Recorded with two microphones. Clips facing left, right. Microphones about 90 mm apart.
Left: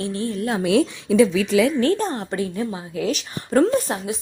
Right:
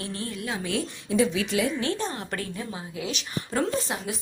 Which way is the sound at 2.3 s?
20° left (ahead or behind).